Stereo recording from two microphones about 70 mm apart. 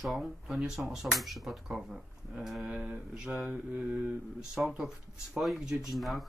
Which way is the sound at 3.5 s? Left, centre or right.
Centre.